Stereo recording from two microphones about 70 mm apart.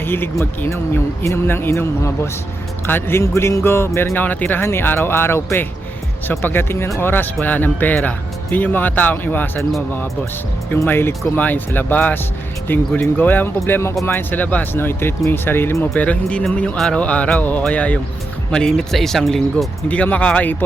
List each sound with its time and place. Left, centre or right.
0.0 s speech: left
0.7 s speech: left
7.4 s speech: left
10.8 s speech: left
16.0 s speech: centre
19.9 s speech: centre